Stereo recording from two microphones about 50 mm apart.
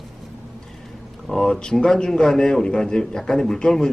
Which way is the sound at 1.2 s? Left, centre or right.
Centre.